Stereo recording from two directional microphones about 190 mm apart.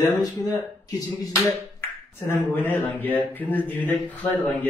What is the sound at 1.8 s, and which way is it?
Speech, 15° left (ahead or behind).